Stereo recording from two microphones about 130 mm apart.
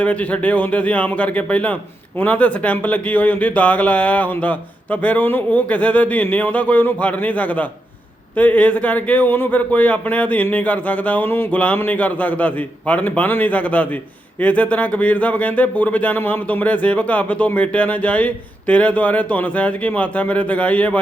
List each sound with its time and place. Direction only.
0.0 s speech: 10° left (ahead or behind)